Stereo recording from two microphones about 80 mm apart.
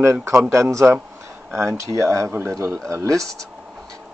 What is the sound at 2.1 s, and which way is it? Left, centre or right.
Speech, right.